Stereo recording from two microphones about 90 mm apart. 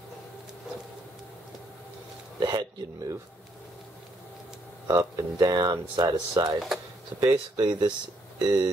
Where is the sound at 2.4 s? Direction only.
50° right (ahead or behind).